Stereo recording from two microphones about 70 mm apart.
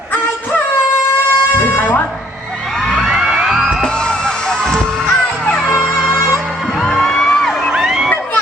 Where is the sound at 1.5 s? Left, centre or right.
Left.